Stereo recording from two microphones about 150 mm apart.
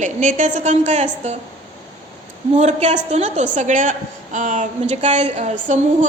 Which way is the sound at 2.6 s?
50° right (ahead or behind).